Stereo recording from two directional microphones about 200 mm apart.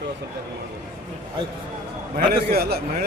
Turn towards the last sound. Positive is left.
turn(degrees=-50)  # may be behind; listen again after turning